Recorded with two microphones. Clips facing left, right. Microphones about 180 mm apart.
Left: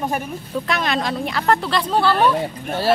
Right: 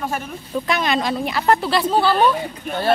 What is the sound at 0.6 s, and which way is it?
A woman's voice, centre (ahead or behind).